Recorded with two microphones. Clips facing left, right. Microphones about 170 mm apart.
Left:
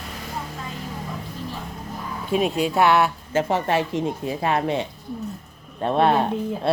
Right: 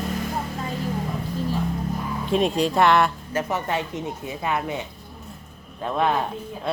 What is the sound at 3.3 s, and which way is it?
Speech, 30° left (ahead or behind).